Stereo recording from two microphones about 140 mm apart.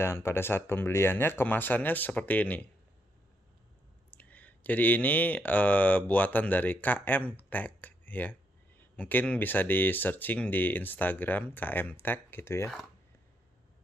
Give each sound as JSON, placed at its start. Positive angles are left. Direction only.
{"t": 0.0, "sound": "speech", "side_deg": 15}
{"t": 4.1, "sound": "speech", "side_deg": 10}